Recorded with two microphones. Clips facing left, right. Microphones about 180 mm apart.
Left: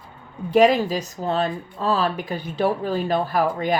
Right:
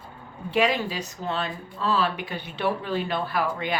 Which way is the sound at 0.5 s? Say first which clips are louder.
Left 7 dB; 40° left (ahead or behind).